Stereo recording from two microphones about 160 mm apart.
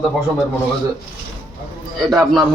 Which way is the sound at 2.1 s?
Centre (ahead or behind).